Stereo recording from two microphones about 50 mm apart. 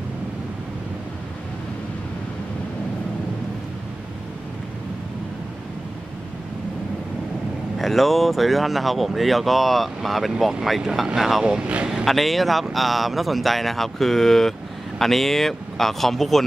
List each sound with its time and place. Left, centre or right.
7.8 s speech: centre
11.4 s speech: centre
12.0 s speech: centre